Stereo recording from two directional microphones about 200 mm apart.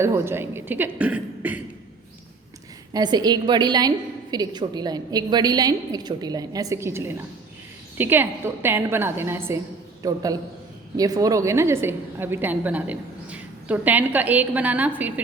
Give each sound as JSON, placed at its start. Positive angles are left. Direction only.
{"t": 0.0, "sound": "a woman's voice", "side_deg": -10}
{"t": 2.9, "sound": "a woman's voice", "side_deg": -20}